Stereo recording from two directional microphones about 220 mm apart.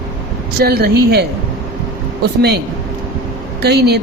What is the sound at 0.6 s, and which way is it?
Speech, 45° right (ahead or behind).